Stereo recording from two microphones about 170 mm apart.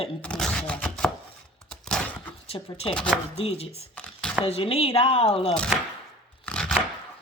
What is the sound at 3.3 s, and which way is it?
Speech, 35° left (ahead or behind).